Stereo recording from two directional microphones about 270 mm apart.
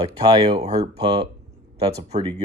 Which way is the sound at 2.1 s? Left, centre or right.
Right.